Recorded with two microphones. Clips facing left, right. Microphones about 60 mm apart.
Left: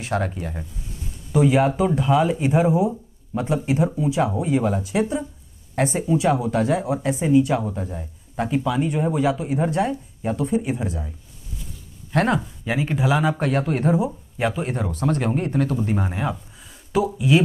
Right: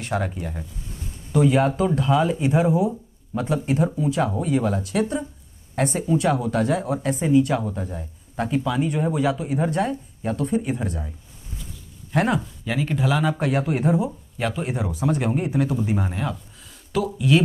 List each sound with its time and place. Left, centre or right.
0.0 s speech: centre
12.4 s speech: centre
14.0 s speech: centre
14.6 s speech: centre
16.0 s speech: centre